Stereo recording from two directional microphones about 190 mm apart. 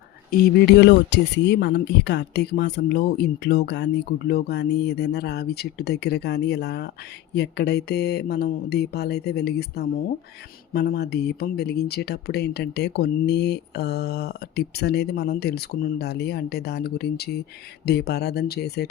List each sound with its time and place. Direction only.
0.3 s speech: 65° left (ahead or behind)